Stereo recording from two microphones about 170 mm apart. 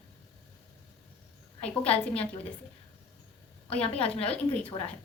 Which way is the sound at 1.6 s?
10° left (ahead or behind).